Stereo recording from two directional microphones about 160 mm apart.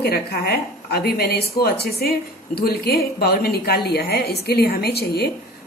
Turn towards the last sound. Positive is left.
turn(degrees=80)